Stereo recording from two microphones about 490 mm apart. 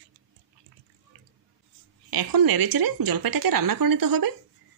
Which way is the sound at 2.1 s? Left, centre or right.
Right.